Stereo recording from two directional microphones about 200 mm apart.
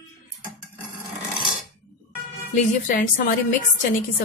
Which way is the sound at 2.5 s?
40° left (ahead or behind).